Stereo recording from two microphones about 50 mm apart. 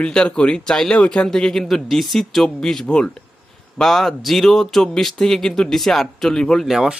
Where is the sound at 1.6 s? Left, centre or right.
Centre.